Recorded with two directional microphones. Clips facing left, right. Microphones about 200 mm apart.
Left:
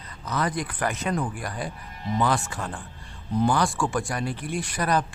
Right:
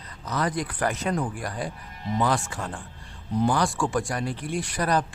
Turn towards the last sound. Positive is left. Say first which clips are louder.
# even
turn(degrees=-35)  # may be behind; listen again after turning